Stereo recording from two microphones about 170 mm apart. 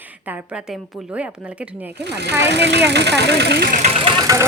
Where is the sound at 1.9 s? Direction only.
80° right.